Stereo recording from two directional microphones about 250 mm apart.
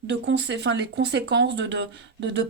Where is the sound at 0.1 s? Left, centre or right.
Right.